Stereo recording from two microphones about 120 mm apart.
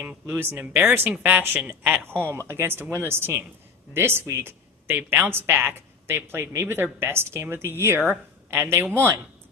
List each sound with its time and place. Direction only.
0.3 s speech: 15° right (ahead or behind)